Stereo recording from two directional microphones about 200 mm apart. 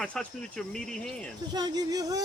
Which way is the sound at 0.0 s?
5° left (ahead or behind).